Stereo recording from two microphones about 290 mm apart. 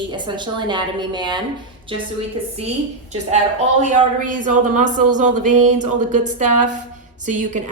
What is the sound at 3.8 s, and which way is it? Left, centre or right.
A woman's voice, right.